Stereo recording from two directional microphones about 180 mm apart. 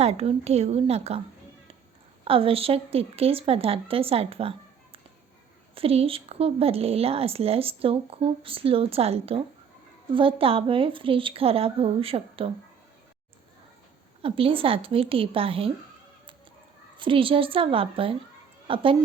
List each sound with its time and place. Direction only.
0.0 s speech: 35° right (ahead or behind)
2.2 s a woman's voice: 30° right (ahead or behind)
14.2 s speech: 30° right (ahead or behind)
17.0 s a woman's voice: 30° right (ahead or behind)